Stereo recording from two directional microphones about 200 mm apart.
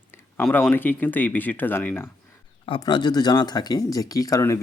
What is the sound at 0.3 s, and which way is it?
Speech, 10° left (ahead or behind).